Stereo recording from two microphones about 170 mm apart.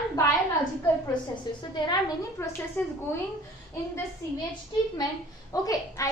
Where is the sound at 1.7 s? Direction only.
20° left (ahead or behind).